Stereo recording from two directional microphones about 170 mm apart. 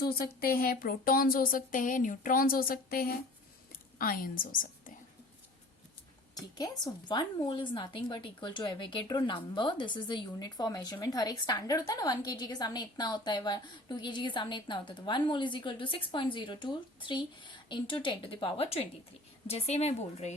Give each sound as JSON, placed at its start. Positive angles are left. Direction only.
{"t": 0.0, "sound": "speech", "side_deg": 65}
{"t": 6.3, "sound": "a woman's voice", "side_deg": 25}